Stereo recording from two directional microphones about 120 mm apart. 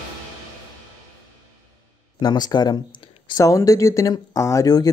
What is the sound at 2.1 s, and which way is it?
Speech, 35° left (ahead or behind).